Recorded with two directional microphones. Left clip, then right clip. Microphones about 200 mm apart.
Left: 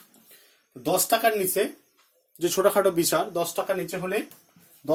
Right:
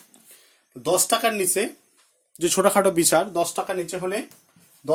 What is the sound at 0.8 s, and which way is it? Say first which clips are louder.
Speech: right 2 dB; 45° right (ahead or behind).